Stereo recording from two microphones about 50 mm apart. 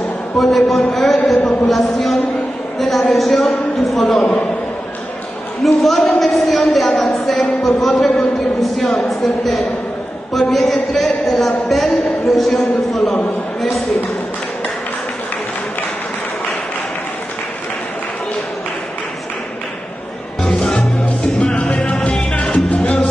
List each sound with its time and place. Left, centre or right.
0.4 s speech: centre
1.4 s speech: left
1.7 s speech: centre
5.6 s speech: centre
20.4 s music: centre